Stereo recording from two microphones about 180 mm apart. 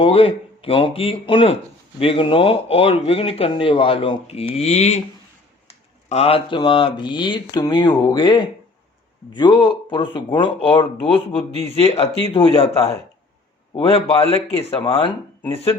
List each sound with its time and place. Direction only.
0.0 s speech: 30° left (ahead or behind)
6.1 s speech: 35° left (ahead or behind)